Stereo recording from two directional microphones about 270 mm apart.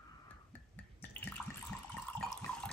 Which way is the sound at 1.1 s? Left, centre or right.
Centre.